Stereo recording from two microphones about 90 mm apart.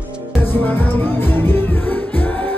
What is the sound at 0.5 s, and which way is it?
Music, 25° left (ahead or behind).